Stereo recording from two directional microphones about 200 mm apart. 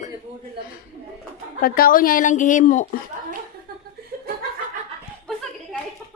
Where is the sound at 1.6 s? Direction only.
45° left (ahead or behind).